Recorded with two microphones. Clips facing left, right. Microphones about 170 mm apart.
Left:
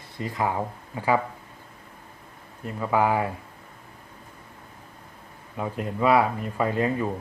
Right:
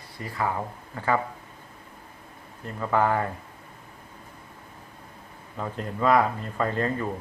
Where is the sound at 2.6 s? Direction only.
10° left (ahead or behind).